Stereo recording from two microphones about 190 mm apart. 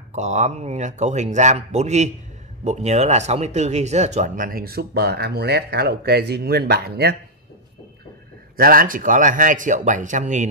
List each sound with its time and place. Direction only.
0.1 s speech: 40° right (ahead or behind); by 7.2 s 55° right (ahead or behind)
8.5 s speech: 50° right (ahead or behind)